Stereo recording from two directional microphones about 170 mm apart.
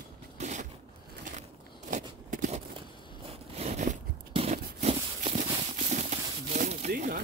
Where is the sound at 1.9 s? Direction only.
50° right (ahead or behind).